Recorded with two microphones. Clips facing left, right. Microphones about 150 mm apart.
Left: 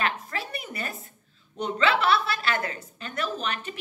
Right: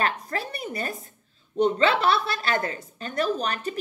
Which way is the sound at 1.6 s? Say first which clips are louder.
Right 4 dB; 45° right (ahead or behind).